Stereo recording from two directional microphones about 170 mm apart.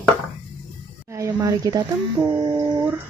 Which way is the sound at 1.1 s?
20° right (ahead or behind).